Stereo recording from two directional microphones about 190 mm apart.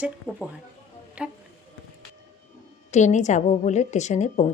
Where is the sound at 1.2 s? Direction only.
5° right (ahead or behind).